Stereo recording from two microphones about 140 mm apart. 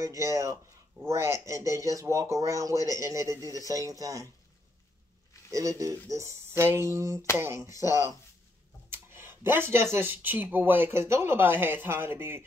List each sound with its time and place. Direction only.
0.0 s speech: 20° right (ahead or behind)
5.5 s speech: 25° right (ahead or behind)